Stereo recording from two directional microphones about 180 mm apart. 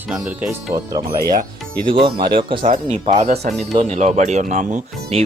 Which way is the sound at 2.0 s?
25° right (ahead or behind).